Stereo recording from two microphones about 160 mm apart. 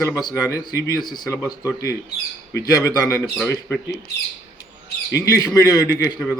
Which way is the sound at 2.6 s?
20° left (ahead or behind).